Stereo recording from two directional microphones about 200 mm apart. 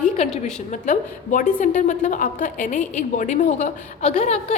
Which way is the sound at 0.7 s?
40° left (ahead or behind).